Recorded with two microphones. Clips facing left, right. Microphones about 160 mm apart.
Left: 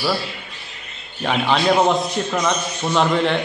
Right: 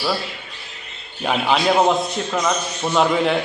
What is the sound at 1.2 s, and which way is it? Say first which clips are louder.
A man's voice: even; 5° right (ahead or behind).